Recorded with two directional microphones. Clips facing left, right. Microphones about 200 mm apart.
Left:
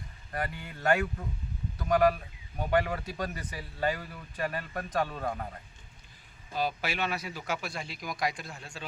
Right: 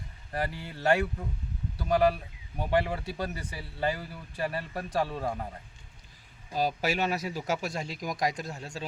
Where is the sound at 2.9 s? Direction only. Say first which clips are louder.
Right 1 dB; 30° right (ahead or behind).